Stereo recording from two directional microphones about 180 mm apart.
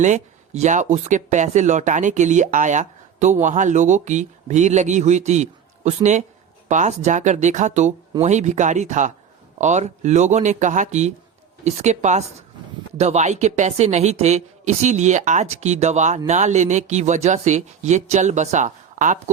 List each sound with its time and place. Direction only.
0.0 s speech: 40° right (ahead or behind)